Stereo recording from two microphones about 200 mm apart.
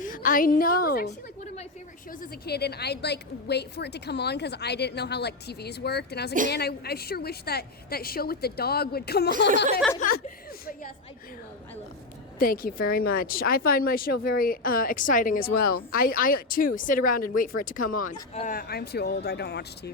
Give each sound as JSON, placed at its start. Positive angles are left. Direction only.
{"t": 0.0, "sound": "a woman's voice", "side_deg": 40}
{"t": 2.5, "sound": "a woman's voice", "side_deg": 55}
{"t": 12.4, "sound": "a woman's voice", "side_deg": 45}